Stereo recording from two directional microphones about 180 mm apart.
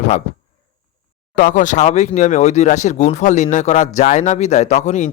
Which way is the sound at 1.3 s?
45° left (ahead or behind).